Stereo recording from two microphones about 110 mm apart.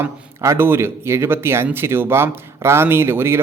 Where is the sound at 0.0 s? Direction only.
20° right (ahead or behind).